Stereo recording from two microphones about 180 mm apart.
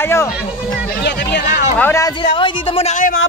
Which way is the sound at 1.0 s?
70° left (ahead or behind).